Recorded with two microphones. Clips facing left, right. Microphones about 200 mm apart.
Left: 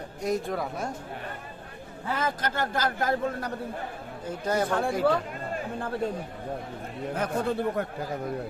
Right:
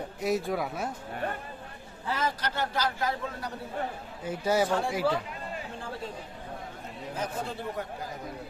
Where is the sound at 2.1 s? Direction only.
50° left (ahead or behind).